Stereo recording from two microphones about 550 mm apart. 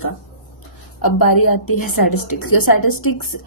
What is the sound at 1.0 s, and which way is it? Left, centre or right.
A woman's voice, left.